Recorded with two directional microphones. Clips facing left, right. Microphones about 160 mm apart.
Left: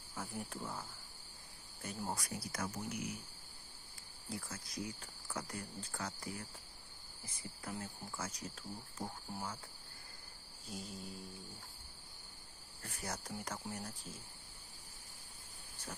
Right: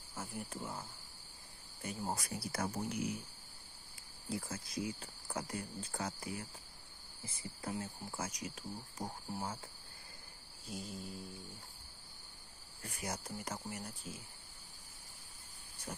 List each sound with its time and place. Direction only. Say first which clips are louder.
0.1 s cricket: even; 10° right (ahead or behind)
2.2 s speech: right 3 dB; 30° right (ahead or behind)
4.3 s speech: right 4 dB; 25° right (ahead or behind)
10.7 s cricket: right 2 dB; 5° right (ahead or behind)
12.8 s cricket: right 2 dB; 10° right (ahead or behind)